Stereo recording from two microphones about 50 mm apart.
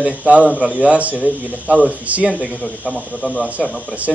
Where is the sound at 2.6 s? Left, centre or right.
Centre.